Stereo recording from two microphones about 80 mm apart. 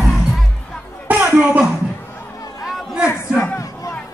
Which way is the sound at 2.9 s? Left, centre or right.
Centre.